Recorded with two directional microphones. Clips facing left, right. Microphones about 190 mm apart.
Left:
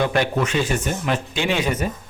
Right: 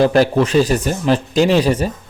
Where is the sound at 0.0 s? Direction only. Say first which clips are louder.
Right 7 dB; 35° right (ahead or behind).